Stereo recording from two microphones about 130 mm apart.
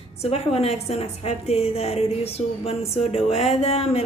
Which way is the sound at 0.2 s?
50° left (ahead or behind).